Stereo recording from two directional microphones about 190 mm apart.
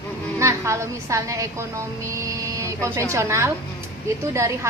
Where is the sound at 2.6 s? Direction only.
15° right (ahead or behind).